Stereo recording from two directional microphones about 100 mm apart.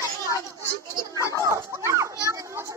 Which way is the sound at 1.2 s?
30° left (ahead or behind).